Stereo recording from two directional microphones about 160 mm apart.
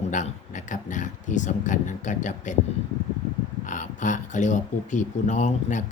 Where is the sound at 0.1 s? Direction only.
50° left (ahead or behind).